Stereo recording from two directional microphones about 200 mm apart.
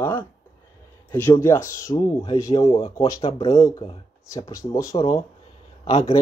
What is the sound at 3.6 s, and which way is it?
Speech, 20° left (ahead or behind).